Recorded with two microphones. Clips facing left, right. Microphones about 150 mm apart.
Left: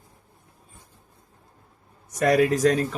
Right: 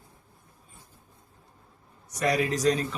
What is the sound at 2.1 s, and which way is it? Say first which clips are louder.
Speech: left 6 dB; 50° left (ahead or behind).